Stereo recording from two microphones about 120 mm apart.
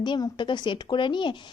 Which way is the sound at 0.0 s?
40° left (ahead or behind).